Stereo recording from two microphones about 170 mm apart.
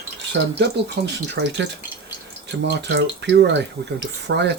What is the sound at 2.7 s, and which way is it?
Speech, 90° right.